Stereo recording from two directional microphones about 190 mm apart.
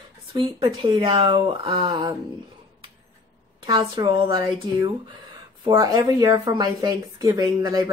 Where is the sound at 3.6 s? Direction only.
25° right (ahead or behind).